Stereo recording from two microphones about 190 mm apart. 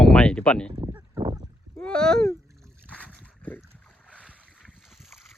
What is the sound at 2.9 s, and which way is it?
Boat, 5° left (ahead or behind).